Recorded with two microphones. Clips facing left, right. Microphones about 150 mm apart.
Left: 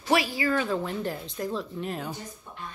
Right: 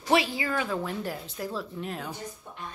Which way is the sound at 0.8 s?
5° right (ahead or behind).